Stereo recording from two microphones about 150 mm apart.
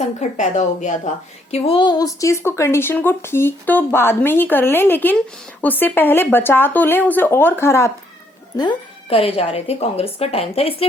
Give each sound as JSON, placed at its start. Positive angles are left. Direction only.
{"t": 0.2, "sound": "a woman's voice", "side_deg": 55}
{"t": 8.5, "sound": "a woman's voice", "side_deg": 35}